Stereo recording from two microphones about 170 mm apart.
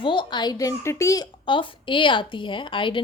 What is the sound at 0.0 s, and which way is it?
A woman's voice, 30° left (ahead or behind).